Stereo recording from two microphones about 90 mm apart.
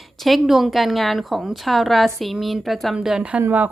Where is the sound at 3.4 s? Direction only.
20° right (ahead or behind).